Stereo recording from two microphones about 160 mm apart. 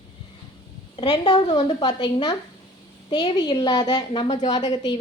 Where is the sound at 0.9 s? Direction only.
30° left (ahead or behind).